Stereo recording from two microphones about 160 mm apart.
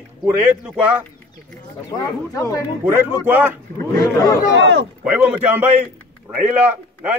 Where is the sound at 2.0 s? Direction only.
20° left (ahead or behind).